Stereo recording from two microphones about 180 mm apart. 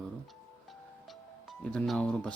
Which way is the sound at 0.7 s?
Centre (ahead or behind).